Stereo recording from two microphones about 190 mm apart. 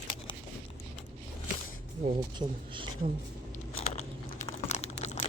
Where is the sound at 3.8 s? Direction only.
30° left (ahead or behind).